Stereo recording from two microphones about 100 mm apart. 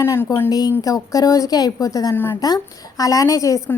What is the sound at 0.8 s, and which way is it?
A woman's voice, 35° left (ahead or behind).